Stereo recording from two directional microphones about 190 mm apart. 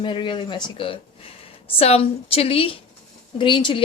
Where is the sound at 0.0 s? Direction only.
25° left (ahead or behind).